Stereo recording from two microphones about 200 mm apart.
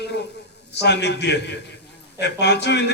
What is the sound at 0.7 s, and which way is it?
Mantra, 60° left (ahead or behind).